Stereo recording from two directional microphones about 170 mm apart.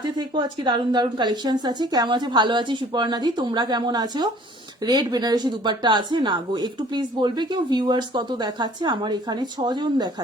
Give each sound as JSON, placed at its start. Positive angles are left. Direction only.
{"t": 0.0, "sound": "speech", "side_deg": -25}